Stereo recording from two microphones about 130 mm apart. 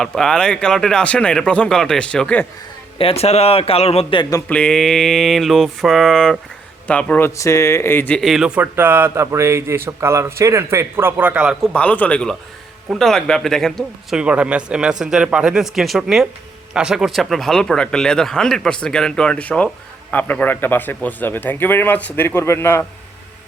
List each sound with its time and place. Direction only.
0.0 s a man's voice: 5° left (ahead or behind)
3.0 s a man's voice: 50° left (ahead or behind)
4.2 s speech: 25° left (ahead or behind)
4.4 s a man's voice: 5° left (ahead or behind)
8.2 s speech: 5° right (ahead or behind)
11.6 s a man's voice: 10° left (ahead or behind)